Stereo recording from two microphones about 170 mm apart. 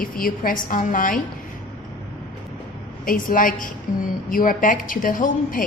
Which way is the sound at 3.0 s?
55° left (ahead or behind).